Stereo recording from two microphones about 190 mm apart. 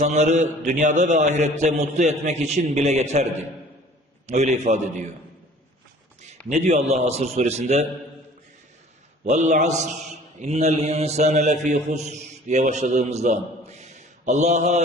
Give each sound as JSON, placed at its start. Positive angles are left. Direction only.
{"t": 0.0, "sound": "a man's voice", "side_deg": -40}
{"t": 6.2, "sound": "a man's voice", "side_deg": -40}
{"t": 9.2, "sound": "a man's voice", "side_deg": -40}